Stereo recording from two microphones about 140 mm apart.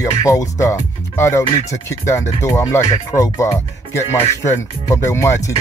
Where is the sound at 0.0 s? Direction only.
25° left (ahead or behind).